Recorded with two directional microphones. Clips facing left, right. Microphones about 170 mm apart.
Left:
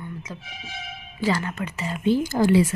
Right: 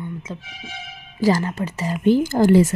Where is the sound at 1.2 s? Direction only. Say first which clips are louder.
Right 5 dB; 35° right (ahead or behind).